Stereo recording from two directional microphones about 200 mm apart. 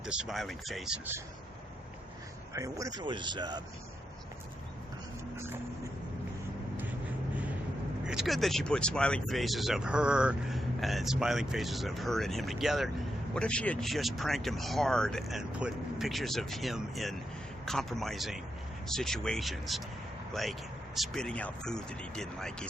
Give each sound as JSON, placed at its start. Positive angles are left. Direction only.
{"t": 0.0, "sound": "speech", "side_deg": -5}
{"t": 2.5, "sound": "a man's voice", "side_deg": -15}
{"t": 5.4, "sound": "vehicle", "side_deg": -15}
{"t": 8.0, "sound": "speech", "side_deg": -5}